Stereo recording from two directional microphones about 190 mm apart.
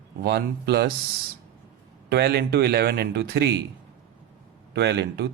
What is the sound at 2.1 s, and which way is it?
Speech, 55° right (ahead or behind).